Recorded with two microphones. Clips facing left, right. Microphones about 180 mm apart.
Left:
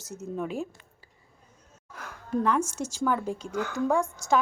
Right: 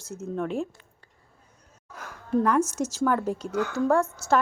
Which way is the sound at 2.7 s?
10° right (ahead or behind).